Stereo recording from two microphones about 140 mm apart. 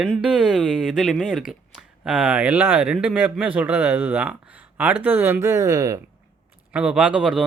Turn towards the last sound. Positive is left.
turn(degrees=-5)  # may be behind; listen again after turning